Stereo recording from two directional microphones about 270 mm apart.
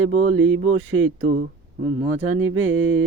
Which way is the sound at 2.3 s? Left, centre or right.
Right.